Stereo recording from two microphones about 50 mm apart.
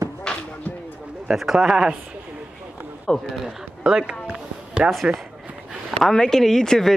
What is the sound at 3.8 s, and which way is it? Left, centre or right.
Speech, centre.